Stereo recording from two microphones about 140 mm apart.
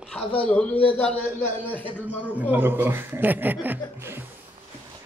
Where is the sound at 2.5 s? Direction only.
15° right (ahead or behind).